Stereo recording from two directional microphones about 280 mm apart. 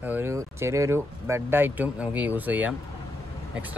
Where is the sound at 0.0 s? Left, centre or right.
Centre.